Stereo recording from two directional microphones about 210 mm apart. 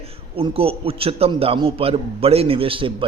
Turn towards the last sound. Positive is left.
turn(degrees=-25)  # may be behind; listen again after turning